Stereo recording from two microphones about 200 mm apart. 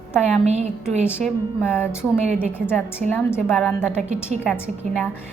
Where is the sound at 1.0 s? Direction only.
10° left (ahead or behind).